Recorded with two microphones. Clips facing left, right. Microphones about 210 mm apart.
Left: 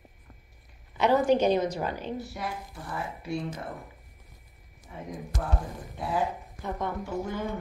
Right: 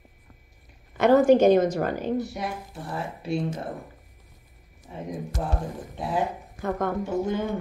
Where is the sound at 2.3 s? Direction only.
25° right (ahead or behind).